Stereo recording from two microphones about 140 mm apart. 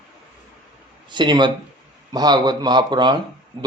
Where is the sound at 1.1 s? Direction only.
30° right (ahead or behind).